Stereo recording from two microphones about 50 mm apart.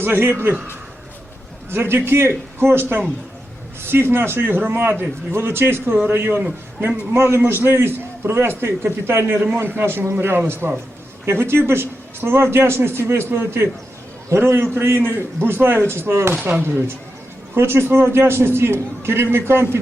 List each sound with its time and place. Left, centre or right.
0.0 s speech: right
1.7 s a man's voice: right
17.5 s a man's voice: right